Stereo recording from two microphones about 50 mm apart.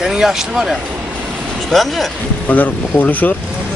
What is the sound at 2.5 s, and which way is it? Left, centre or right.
Speech, left.